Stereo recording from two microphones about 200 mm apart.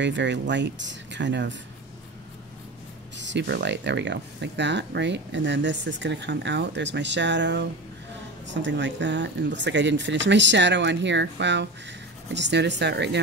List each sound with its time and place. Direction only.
0.0 s speech: 60° right (ahead or behind)
3.2 s speech: 60° right (ahead or behind)